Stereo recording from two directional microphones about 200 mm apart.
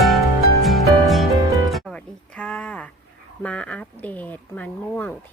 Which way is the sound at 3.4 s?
5° left (ahead or behind).